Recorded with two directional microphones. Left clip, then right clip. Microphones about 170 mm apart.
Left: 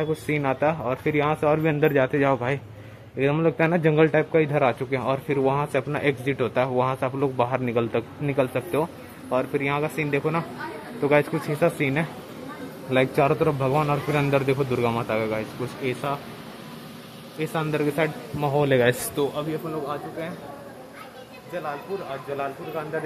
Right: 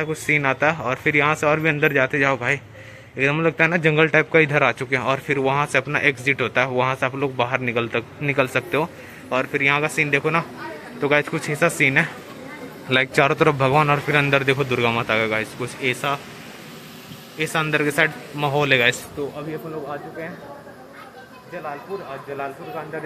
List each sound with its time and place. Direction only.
0.0 s a man's voice: 10° left (ahead or behind)
17.4 s a man's voice: centre (ahead or behind)
18.7 s a man's voice: 30° left (ahead or behind)